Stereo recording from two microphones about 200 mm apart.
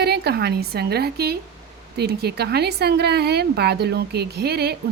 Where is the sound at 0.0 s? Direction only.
55° right (ahead or behind).